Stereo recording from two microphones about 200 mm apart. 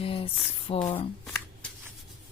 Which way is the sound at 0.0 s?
25° left (ahead or behind).